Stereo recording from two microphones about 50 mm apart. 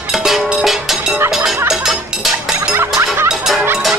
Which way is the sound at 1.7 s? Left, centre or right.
Centre.